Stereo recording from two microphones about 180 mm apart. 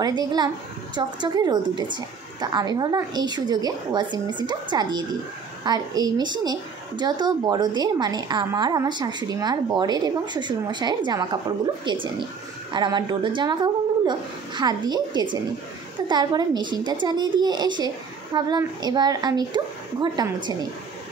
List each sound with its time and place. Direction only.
0.0 s a woman's voice: 20° right (ahead or behind)